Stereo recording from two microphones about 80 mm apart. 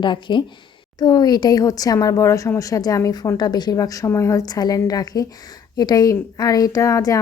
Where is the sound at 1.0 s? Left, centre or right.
Left.